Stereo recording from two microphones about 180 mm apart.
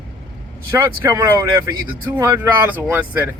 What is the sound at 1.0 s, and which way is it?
Speech, 15° right (ahead or behind).